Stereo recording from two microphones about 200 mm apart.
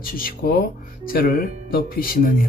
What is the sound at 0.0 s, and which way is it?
A man's voice, 45° left (ahead or behind).